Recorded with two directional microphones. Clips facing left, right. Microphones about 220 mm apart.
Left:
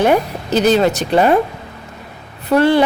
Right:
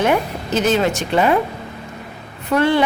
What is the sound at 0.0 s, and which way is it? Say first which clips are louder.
A woman's voice: left 3 dB; 35° left (ahead or behind).